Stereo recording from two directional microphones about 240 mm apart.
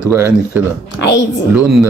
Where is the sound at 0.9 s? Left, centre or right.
Left.